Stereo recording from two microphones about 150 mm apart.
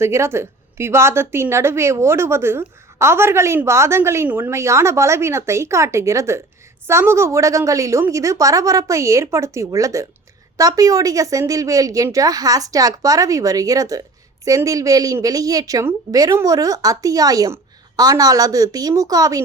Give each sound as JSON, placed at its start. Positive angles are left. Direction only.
{"t": 0.0, "sound": "a woman's voice", "side_deg": -15}